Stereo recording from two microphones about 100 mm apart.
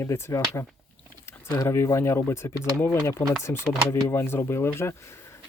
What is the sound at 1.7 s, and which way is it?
Speech, 25° left (ahead or behind).